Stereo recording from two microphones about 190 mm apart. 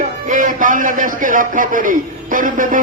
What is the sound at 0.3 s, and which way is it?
A man's voice, 45° right (ahead or behind).